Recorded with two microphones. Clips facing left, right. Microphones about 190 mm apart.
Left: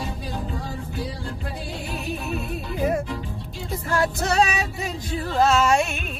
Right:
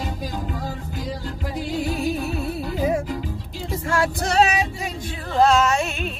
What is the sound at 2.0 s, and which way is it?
Music, 35° right (ahead or behind).